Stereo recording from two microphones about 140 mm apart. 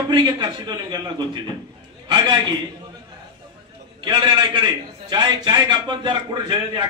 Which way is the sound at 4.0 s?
35° right (ahead or behind).